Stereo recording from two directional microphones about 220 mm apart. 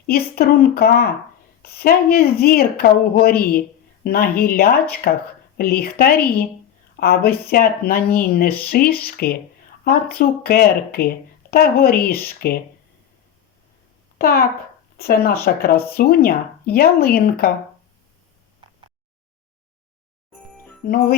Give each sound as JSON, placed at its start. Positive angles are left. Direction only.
{"t": 0.1, "sound": "a woman's voice", "side_deg": 45}
{"t": 14.2, "sound": "a child's voice", "side_deg": 45}
{"t": 20.8, "sound": "speech", "side_deg": 45}